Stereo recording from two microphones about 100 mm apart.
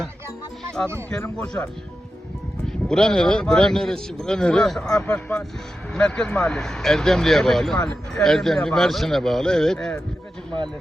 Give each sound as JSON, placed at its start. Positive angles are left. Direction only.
{"t": 1.2, "sound": "speech", "side_deg": 15}
{"t": 2.6, "sound": "speech", "side_deg": 5}